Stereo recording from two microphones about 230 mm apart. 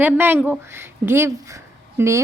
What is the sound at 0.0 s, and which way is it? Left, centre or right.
A woman's voice, centre.